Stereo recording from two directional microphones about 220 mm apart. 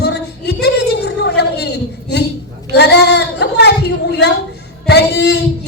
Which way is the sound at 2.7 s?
50° left (ahead or behind).